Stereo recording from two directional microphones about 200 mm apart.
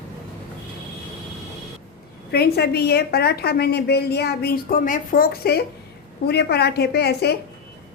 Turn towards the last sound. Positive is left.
turn(degrees=55)  # may be behind; listen again after turning